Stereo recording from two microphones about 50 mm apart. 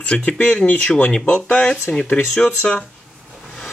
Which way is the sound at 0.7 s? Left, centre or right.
Left.